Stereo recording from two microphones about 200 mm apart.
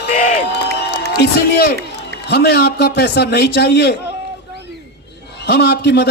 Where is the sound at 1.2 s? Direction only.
50° left (ahead or behind).